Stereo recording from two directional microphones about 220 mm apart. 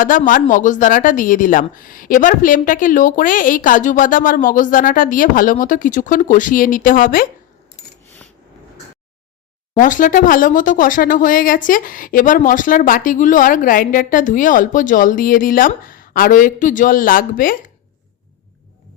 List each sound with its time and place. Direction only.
0.0 s speech: 35° left (ahead or behind)
9.7 s speech: 35° left (ahead or behind)